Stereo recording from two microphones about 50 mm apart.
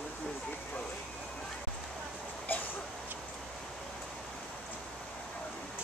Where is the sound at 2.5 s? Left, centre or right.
Left.